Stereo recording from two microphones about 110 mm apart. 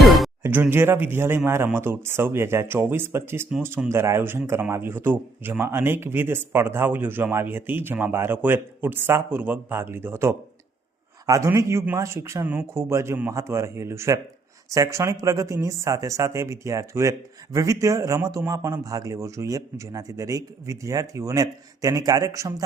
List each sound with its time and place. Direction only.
0.4 s speech: 20° right (ahead or behind)